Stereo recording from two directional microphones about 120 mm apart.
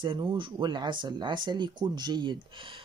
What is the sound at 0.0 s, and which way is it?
Speech, 40° right (ahead or behind).